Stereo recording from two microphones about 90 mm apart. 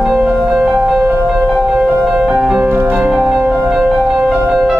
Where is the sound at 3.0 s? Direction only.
10° right (ahead or behind).